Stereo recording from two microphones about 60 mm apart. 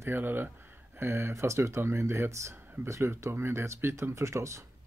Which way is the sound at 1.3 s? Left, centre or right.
Right.